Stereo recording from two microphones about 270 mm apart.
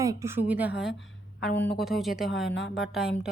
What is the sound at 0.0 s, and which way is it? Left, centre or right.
A woman's voice, centre.